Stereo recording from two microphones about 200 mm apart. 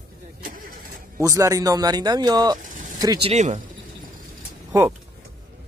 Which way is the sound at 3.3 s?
35° right (ahead or behind).